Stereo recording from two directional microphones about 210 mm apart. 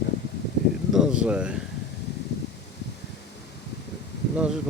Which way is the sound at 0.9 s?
5° right (ahead or behind).